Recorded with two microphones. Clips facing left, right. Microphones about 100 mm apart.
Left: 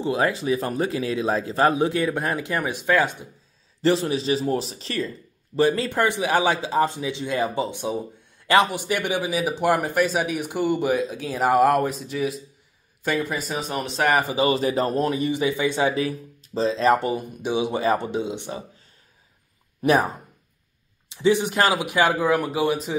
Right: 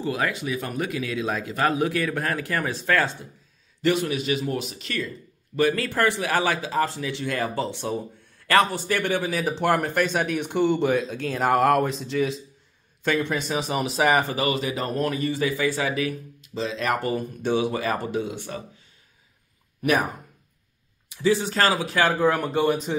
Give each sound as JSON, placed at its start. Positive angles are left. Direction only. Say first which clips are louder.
{"t": 0.0, "sound": "speech", "louder": "left 4 dB", "side_deg": 30}
{"t": 3.8, "sound": "a man's voice", "louder": "left 2 dB", "side_deg": 30}
{"t": 14.3, "sound": "a man's voice", "louder": "left 4 dB", "side_deg": 30}
{"t": 15.0, "sound": "speech", "louder": "left 2 dB", "side_deg": 20}
{"t": 17.1, "sound": "speech", "louder": "right 1 dB", "side_deg": 15}
{"t": 19.8, "sound": "speech", "louder": "left 3 dB", "side_deg": 25}
{"t": 22.3, "sound": "speech", "louder": "left 1 dB", "side_deg": 5}